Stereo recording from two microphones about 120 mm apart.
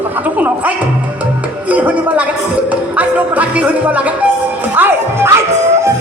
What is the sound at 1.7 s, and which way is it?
Speech, 10° right (ahead or behind).